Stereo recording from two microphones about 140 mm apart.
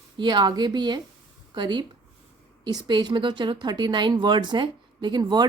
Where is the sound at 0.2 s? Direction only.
30° right (ahead or behind).